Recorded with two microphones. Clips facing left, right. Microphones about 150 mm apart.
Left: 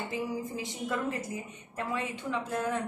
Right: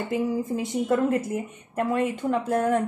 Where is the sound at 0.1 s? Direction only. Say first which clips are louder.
Right 12 dB; 55° right (ahead or behind).